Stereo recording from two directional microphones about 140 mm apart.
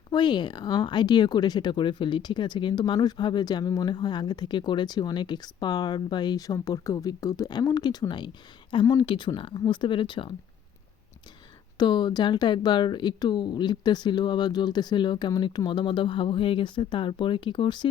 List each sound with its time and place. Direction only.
0.1 s speech: 35° left (ahead or behind)
11.8 s speech: 35° left (ahead or behind)